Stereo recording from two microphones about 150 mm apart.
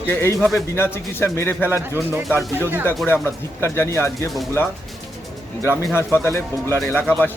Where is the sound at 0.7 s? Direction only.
15° left (ahead or behind).